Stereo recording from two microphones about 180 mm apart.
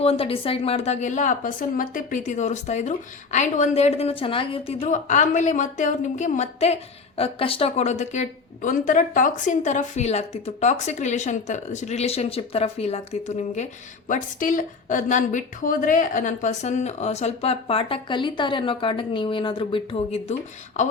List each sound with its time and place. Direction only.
0.0 s a woman's voice: 35° left (ahead or behind)